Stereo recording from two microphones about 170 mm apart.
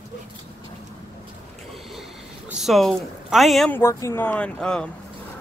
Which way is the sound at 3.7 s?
15° left (ahead or behind).